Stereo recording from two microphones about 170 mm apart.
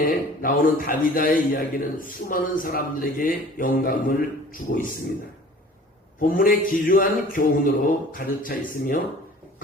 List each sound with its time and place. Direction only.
0.0 s a man's voice: 55° left (ahead or behind)
6.1 s a man's voice: 55° left (ahead or behind)